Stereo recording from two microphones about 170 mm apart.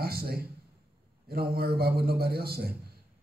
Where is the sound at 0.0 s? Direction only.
65° right (ahead or behind).